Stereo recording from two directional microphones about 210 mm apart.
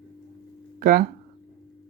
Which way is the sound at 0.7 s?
45° right (ahead or behind).